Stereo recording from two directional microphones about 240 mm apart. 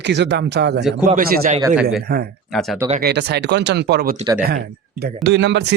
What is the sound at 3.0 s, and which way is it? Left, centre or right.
A man's voice, right.